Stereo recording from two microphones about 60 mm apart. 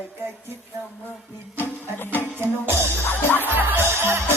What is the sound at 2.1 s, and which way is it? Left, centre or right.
Music, right.